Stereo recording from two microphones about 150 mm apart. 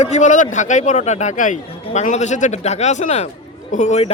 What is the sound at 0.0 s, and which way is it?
Speech, 50° left (ahead or behind).